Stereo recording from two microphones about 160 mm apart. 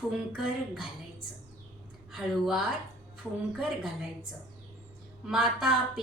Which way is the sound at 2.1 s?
Centre (ahead or behind).